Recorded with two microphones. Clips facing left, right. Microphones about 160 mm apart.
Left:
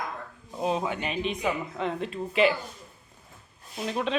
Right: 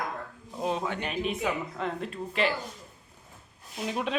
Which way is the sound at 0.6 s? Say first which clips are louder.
Left 2 dB; 5° left (ahead or behind).